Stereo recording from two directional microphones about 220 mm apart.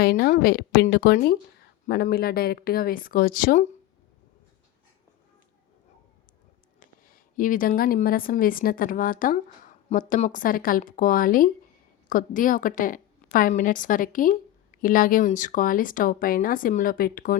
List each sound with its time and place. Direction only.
0.0 s a woman's voice: 45° left (ahead or behind)
7.3 s a woman's voice: 40° left (ahead or behind)